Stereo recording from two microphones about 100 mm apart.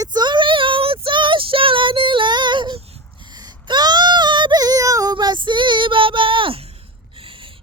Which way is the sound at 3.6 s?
45° right (ahead or behind).